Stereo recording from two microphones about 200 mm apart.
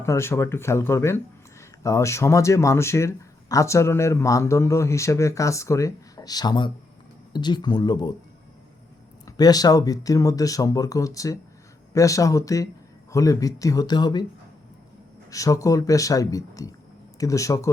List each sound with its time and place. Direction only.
0.0 s speech: 15° left (ahead or behind)
9.2 s speech: 20° left (ahead or behind)
15.3 s speech: 15° left (ahead or behind)